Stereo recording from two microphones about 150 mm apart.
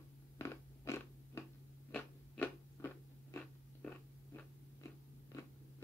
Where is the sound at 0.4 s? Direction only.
20° left (ahead or behind).